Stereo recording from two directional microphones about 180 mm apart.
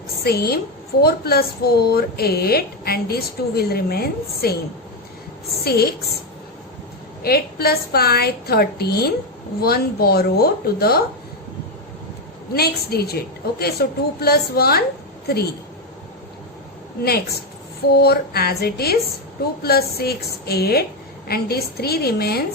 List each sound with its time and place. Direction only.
0.2 s a woman's voice: 60° left (ahead or behind)
5.6 s speech: 60° left (ahead or behind)
7.2 s speech: 60° left (ahead or behind)
12.5 s speech: 60° left (ahead or behind)
17.9 s speech: 60° left (ahead or behind)